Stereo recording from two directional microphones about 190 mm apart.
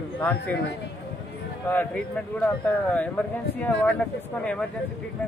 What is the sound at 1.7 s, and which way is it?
Speech, 10° left (ahead or behind).